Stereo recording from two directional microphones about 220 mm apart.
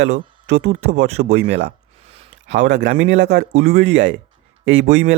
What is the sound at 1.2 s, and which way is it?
Speech, 45° right (ahead or behind).